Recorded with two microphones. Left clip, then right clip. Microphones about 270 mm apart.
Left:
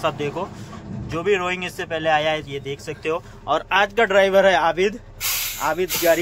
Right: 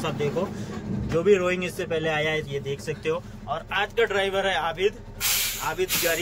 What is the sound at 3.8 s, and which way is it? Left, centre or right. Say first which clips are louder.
A man's voice: left 6 dB; centre.